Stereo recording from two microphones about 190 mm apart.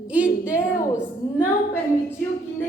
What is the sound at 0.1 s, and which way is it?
Speech, 5° right (ahead or behind).